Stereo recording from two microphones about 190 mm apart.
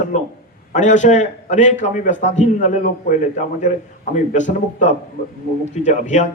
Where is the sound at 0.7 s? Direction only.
40° left (ahead or behind).